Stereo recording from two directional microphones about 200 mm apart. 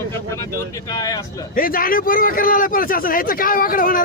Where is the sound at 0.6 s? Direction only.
20° left (ahead or behind).